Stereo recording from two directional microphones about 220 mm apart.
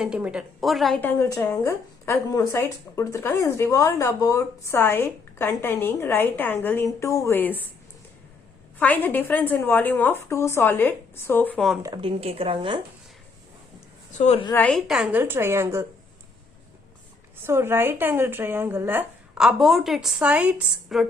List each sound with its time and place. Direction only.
0.0 s a woman's voice: 5° right (ahead or behind)
1.2 s speech: 10° left (ahead or behind)
8.8 s speech: 10° left (ahead or behind)
11.8 s speech: 20° right (ahead or behind)
14.2 s a woman's voice: 25° left (ahead or behind)
14.5 s a woman's voice: 5° left (ahead or behind); by 15.9 s 10° right (ahead or behind)
17.4 s a woman's voice: 10° right (ahead or behind)